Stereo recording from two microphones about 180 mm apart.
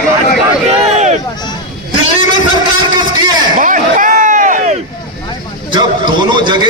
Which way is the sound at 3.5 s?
45° right (ahead or behind).